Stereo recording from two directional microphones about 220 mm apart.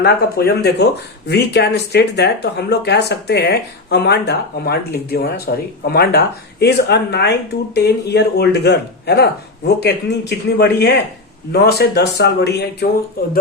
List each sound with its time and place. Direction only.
0.0 s speech: 45° left (ahead or behind)